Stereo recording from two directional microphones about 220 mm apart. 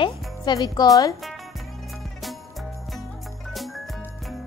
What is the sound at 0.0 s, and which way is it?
Music, 20° left (ahead or behind).